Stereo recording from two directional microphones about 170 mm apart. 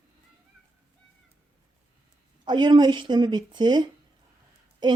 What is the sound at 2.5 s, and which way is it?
A woman's voice, 25° right (ahead or behind).